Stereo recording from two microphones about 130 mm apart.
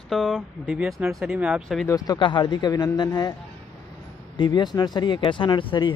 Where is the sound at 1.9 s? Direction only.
30° left (ahead or behind).